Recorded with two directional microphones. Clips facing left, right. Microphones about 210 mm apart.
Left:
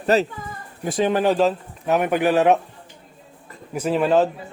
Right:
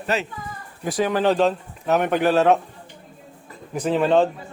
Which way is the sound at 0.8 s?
25° left (ahead or behind).